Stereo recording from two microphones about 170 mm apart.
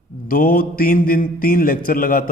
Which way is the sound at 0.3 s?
55° left (ahead or behind).